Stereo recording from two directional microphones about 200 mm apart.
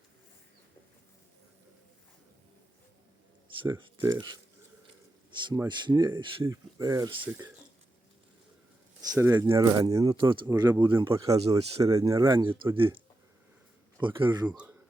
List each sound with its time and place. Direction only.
3.6 s speech: 25° right (ahead or behind)
9.0 s speech: 15° right (ahead or behind)
11.3 s speech: 30° right (ahead or behind)
11.8 s speech: 15° right (ahead or behind)
14.0 s speech: 25° right (ahead or behind)
14.4 s a man's voice: 5° right (ahead or behind)